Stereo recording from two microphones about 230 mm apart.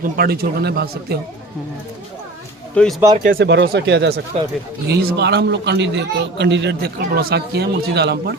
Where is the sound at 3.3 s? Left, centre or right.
Right.